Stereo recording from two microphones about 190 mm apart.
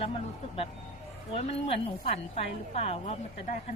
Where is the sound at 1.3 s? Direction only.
35° left (ahead or behind).